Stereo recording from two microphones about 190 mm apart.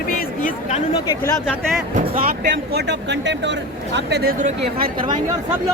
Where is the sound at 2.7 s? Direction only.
60° right (ahead or behind).